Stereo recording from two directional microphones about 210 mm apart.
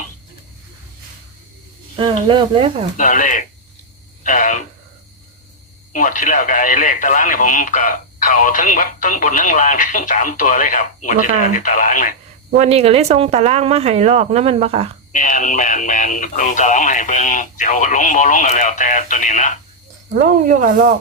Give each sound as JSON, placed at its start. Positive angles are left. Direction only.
{"t": 2.0, "sound": "speech", "side_deg": -25}
{"t": 3.0, "sound": "speech", "side_deg": 40}
{"t": 5.9, "sound": "speech", "side_deg": 40}
{"t": 12.5, "sound": "speech", "side_deg": -30}
{"t": 15.1, "sound": "speech", "side_deg": 35}
{"t": 20.1, "sound": "speech", "side_deg": -40}